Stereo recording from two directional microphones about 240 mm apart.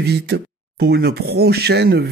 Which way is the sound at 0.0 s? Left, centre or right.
Right.